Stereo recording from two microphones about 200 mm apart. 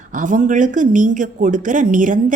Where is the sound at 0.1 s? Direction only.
40° right (ahead or behind).